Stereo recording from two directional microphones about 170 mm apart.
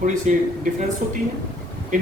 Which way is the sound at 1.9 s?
50° right (ahead or behind).